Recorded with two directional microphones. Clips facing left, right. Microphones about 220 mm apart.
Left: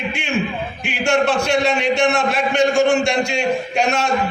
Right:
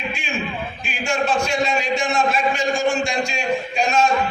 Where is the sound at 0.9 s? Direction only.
70° left (ahead or behind).